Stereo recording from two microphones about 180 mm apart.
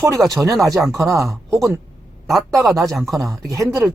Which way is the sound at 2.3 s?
Centre (ahead or behind).